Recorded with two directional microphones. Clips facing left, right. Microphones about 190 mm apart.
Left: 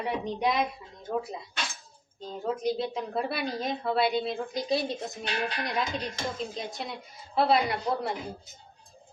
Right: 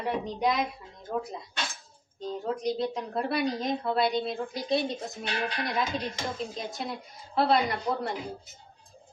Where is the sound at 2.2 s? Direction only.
Centre (ahead or behind).